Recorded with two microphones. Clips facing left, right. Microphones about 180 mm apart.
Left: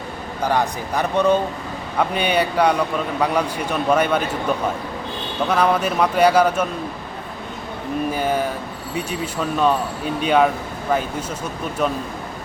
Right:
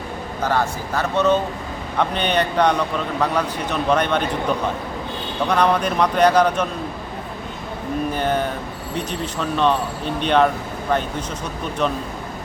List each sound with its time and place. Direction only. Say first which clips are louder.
0.4 s speech: left 1 dB; 15° left (ahead or behind)
8.1 s speech: even; 5° left (ahead or behind)
11.8 s speech: even; 5° left (ahead or behind)